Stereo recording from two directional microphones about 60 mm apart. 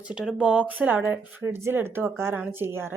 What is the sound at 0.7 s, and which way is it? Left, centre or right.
A woman's voice, right.